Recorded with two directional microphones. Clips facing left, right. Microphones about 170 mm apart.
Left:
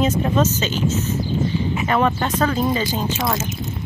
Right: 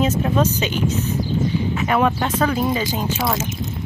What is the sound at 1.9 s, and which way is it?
Speech, 5° right (ahead or behind).